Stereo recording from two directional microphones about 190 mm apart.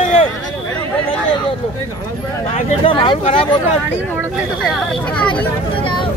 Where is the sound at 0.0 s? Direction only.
30° left (ahead or behind).